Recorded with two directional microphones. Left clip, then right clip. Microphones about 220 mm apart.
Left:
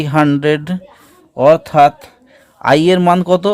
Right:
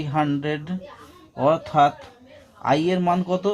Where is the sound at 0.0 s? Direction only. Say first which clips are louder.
Left 11 dB; 55° left (ahead or behind).